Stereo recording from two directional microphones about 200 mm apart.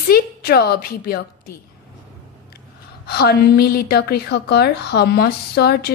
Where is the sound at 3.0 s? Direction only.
55° left (ahead or behind).